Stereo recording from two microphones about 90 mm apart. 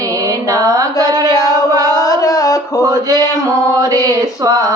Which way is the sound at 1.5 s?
40° right (ahead or behind).